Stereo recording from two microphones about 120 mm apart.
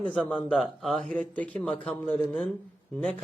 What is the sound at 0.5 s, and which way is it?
A man's voice, centre (ahead or behind).